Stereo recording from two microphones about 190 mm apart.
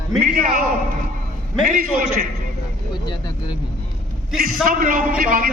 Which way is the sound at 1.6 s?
45° right (ahead or behind).